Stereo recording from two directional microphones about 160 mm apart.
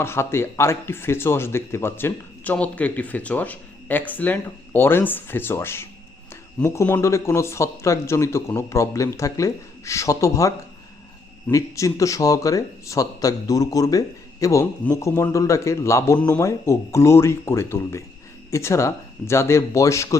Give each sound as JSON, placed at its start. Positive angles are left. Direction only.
{"t": 0.0, "sound": "speech", "side_deg": 15}